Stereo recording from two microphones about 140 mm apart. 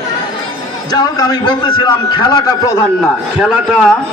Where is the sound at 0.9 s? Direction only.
30° left (ahead or behind).